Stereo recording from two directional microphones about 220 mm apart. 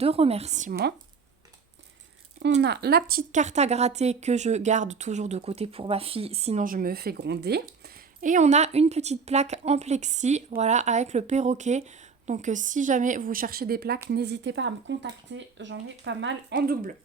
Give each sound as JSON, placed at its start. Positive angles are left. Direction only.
{"t": 0.0, "sound": "a woman's voice", "side_deg": -25}
{"t": 2.4, "sound": "a woman's voice", "side_deg": -50}
{"t": 8.2, "sound": "a woman's voice", "side_deg": -35}
{"t": 16.6, "sound": "a woman's voice", "side_deg": -40}